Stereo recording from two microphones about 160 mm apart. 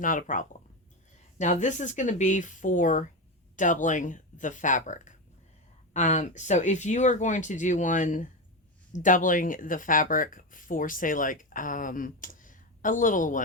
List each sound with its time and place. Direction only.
0.0 s speech: 55° left (ahead or behind)